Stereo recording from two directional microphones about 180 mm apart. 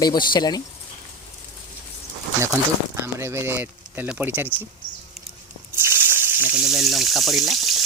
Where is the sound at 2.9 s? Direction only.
15° right (ahead or behind).